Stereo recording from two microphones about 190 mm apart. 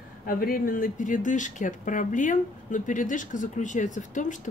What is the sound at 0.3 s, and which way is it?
Speech, 50° left (ahead or behind).